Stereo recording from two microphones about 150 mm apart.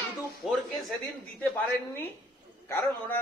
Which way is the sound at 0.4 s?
Centre (ahead or behind).